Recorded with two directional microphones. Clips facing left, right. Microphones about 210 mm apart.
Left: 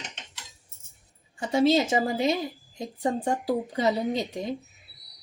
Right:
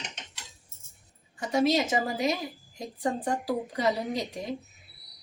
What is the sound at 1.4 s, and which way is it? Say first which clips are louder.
A woman's voice: left 3 dB; 25° left (ahead or behind).